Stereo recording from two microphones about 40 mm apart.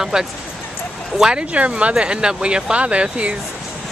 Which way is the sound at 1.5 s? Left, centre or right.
Right.